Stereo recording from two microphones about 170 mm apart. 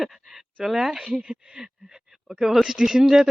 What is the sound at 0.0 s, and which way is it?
Speech, centre (ahead or behind).